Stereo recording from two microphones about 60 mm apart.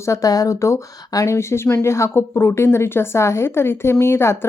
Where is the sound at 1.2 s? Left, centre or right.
Left.